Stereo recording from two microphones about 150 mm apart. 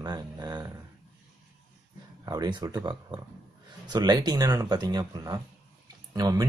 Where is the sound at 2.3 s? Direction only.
30° right (ahead or behind).